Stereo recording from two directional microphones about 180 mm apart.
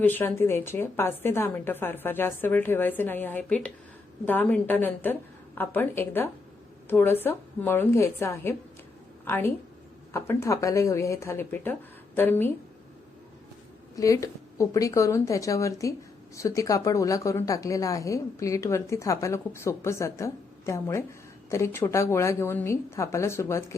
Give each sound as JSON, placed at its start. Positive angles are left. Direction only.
{"t": 0.0, "sound": "a woman's voice", "side_deg": 10}
{"t": 13.9, "sound": "a woman's voice", "side_deg": 20}